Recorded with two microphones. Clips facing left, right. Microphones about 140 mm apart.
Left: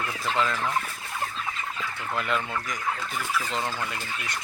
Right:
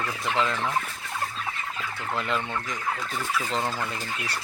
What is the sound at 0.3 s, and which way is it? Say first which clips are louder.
Speech: even; 20° right (ahead or behind).